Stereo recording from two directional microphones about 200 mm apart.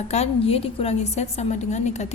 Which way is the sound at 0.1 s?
30° left (ahead or behind).